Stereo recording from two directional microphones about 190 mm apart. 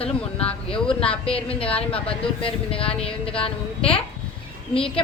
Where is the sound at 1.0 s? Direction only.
5° left (ahead or behind).